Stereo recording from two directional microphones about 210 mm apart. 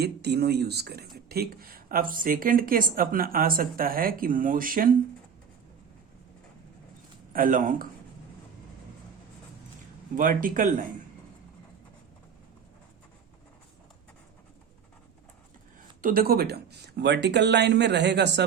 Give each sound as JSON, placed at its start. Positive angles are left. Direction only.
{"t": 0.0, "sound": "speech", "side_deg": -50}
{"t": 7.3, "sound": "speech", "side_deg": -40}
{"t": 10.2, "sound": "speech", "side_deg": -40}
{"t": 16.0, "sound": "speech", "side_deg": -40}